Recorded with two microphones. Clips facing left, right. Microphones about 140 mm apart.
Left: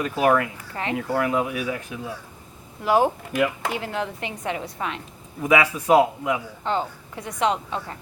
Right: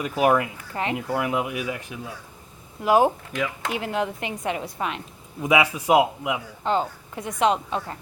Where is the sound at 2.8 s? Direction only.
15° right (ahead or behind).